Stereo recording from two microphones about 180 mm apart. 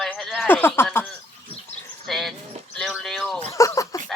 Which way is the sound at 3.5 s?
15° left (ahead or behind).